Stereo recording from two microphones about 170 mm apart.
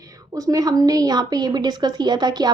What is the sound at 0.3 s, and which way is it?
A woman's voice, 20° right (ahead or behind).